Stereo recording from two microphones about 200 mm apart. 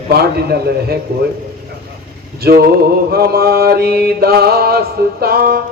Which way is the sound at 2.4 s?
50° right (ahead or behind).